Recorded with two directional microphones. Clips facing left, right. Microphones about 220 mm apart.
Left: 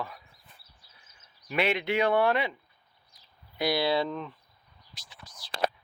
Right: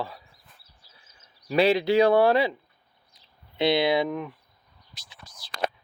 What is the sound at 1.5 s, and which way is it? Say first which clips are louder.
Speech: right 7 dB; 35° right (ahead or behind).